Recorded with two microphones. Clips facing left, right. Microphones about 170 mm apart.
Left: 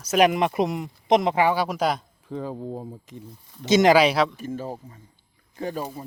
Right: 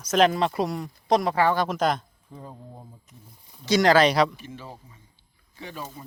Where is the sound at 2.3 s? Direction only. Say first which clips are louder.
Left 12 dB; 90° left.